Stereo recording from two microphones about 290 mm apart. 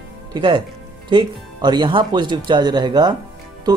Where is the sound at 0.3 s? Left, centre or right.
Centre.